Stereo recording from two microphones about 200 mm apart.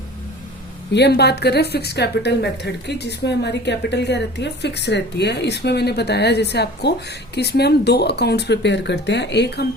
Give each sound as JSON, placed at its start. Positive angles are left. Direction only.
{"t": 0.9, "sound": "a woman's voice", "side_deg": 55}